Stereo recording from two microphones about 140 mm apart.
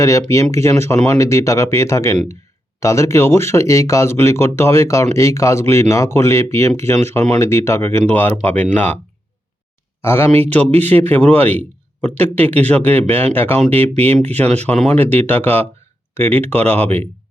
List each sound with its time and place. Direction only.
0.0 s speech: 20° left (ahead or behind)
10.0 s speech: 15° left (ahead or behind)
13.9 s speech: 50° right (ahead or behind)
14.8 s speech: 10° left (ahead or behind)
16.8 s speech: 50° right (ahead or behind)